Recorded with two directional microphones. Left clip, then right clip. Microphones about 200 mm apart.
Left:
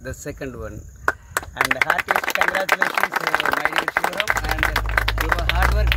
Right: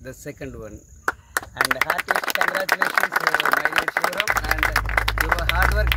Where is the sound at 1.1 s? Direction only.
55° right (ahead or behind).